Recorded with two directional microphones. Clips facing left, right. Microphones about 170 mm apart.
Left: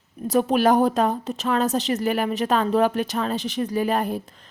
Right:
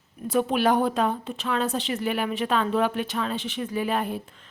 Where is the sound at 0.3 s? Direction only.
40° left (ahead or behind).